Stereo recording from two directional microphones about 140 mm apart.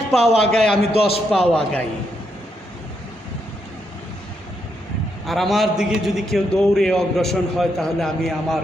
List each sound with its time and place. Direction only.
0.1 s a man's voice: centre (ahead or behind)
0.7 s a man's voice: 45° left (ahead or behind)
1.3 s a man's voice: centre (ahead or behind)
5.2 s a man's voice: centre (ahead or behind)